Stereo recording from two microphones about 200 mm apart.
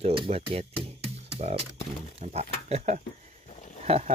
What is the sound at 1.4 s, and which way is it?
Speech, 30° right (ahead or behind).